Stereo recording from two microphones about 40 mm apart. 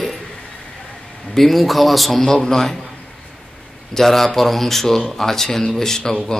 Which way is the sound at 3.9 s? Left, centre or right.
Centre.